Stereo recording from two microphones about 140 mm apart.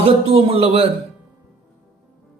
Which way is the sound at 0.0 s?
45° right (ahead or behind).